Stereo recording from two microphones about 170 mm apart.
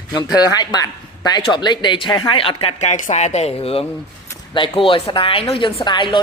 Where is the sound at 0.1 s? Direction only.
20° left (ahead or behind).